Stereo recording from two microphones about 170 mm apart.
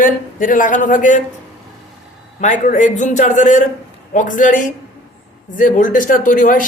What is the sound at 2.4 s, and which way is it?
A woman's voice, 50° left (ahead or behind).